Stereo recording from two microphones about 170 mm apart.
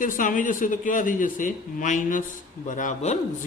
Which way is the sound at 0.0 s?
55° left (ahead or behind).